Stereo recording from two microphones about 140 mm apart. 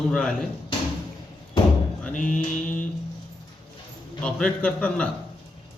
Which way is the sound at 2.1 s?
65° left (ahead or behind).